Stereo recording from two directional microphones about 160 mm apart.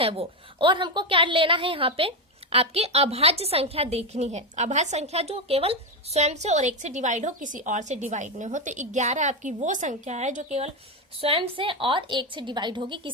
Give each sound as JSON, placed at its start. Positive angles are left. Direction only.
{"t": 0.0, "sound": "a woman's voice", "side_deg": -35}
{"t": 11.2, "sound": "a woman's voice", "side_deg": -35}